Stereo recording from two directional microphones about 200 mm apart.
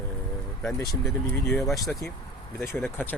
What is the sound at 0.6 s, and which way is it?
Speech, 10° left (ahead or behind).